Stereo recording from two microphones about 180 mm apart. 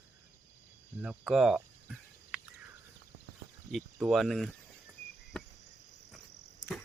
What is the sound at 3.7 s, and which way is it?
Speech, centre (ahead or behind).